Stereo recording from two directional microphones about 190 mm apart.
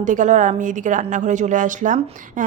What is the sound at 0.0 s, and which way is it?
A woman's voice, 40° right (ahead or behind).